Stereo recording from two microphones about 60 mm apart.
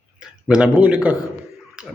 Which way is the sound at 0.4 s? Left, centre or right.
Centre.